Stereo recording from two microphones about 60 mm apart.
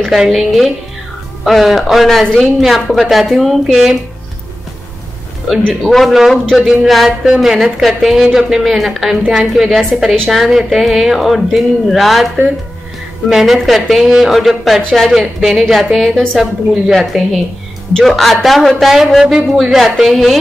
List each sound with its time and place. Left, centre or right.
0.1 s a woman's voice: centre
5.8 s a woman's voice: centre
10.1 s a woman's voice: centre
13.3 s a woman's voice: centre